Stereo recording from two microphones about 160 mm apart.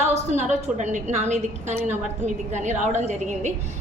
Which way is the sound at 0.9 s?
45° right (ahead or behind).